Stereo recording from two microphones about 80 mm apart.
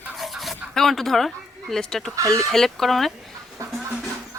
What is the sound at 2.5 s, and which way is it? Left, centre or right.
Speech, centre.